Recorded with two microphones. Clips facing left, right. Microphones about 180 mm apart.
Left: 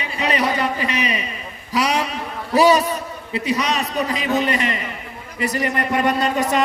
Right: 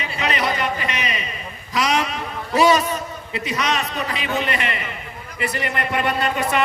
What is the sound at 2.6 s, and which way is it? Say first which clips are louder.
A man's voice: left 2 dB; 35° left (ahead or behind).